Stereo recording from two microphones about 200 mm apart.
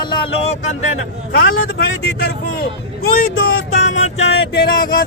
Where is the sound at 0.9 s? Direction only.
90° left.